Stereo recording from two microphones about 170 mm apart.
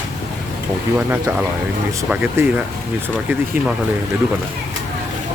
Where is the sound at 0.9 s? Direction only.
10° right (ahead or behind).